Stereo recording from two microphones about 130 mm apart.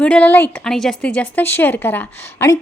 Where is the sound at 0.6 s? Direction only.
5° left (ahead or behind); by 2.6 s 20° left (ahead or behind).